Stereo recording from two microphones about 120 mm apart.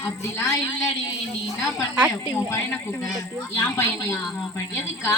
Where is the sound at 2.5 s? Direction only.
20° left (ahead or behind).